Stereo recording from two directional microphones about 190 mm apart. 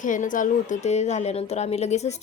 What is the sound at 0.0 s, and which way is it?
Speech, 40° left (ahead or behind).